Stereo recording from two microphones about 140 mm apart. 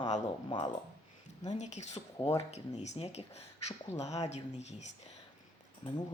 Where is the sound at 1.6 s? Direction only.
55° left (ahead or behind).